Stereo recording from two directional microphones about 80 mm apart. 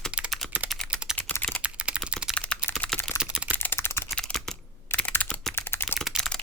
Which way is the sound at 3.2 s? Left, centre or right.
Centre.